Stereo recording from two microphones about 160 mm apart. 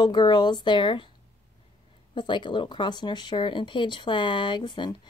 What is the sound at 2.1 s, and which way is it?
Speech, 30° left (ahead or behind).